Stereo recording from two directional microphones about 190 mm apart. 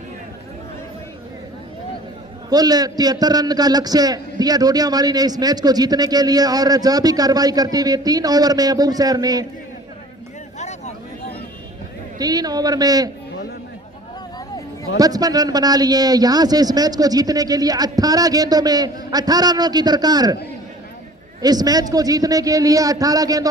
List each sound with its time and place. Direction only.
2.5 s a man's voice: 20° right (ahead or behind)
10.6 s vehicle: 35° left (ahead or behind)
12.2 s a man's voice: 20° right (ahead or behind)
14.9 s a man's voice: 20° right (ahead or behind)
21.4 s a man's voice: 20° right (ahead or behind)